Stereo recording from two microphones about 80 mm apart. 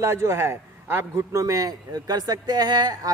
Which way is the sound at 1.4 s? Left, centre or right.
Right.